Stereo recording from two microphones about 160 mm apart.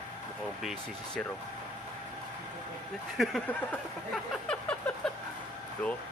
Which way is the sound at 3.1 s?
Centre (ahead or behind).